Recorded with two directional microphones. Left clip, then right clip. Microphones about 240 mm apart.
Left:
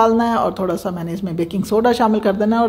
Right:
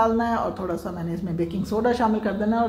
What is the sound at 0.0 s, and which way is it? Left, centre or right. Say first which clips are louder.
A woman's voice: left 7 dB; left.